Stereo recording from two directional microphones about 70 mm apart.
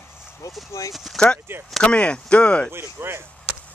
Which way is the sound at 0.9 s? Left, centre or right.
Centre.